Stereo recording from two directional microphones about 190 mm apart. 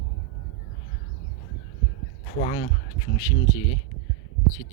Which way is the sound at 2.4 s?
25° left (ahead or behind).